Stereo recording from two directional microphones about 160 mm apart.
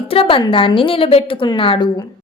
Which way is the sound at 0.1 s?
35° left (ahead or behind).